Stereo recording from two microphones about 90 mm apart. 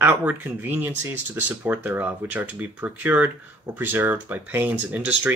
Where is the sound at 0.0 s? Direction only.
20° right (ahead or behind).